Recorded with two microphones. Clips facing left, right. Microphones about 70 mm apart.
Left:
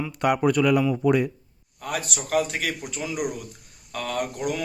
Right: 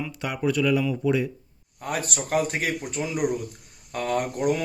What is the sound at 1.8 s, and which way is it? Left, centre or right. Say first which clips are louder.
Speech: right 1 dB; right.